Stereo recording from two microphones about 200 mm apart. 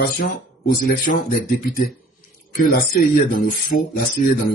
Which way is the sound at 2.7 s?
50° left (ahead or behind).